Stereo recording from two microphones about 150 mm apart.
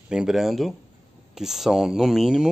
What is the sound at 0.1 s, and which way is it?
Speech, 5° right (ahead or behind).